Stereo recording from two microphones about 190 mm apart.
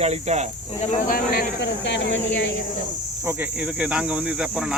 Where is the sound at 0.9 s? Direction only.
45° left (ahead or behind); by 2.5 s 70° left (ahead or behind).